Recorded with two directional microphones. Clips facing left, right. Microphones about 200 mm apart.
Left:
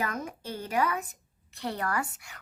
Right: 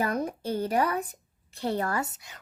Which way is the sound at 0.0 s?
35° right (ahead or behind).